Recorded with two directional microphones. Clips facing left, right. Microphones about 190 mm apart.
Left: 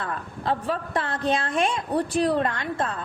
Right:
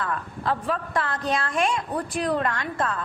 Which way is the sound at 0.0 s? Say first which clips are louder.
Right 1 dB; 25° left (ahead or behind).